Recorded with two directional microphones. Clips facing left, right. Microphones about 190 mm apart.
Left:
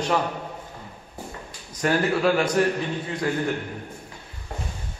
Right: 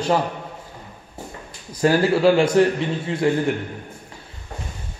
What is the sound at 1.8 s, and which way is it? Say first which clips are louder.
A man's voice: right 5 dB; 30° right (ahead or behind).